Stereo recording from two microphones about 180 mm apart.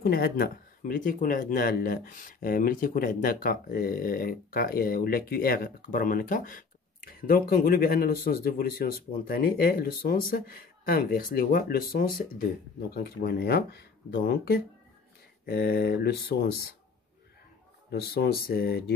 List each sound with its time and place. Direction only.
0.0 s speech: 55° left (ahead or behind)
18.0 s speech: 60° left (ahead or behind)